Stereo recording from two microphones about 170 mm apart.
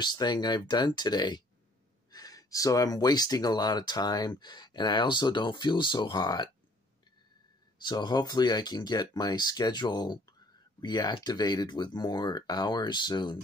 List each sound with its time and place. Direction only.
0.0 s speech: 25° left (ahead or behind)
7.8 s speech: 25° left (ahead or behind)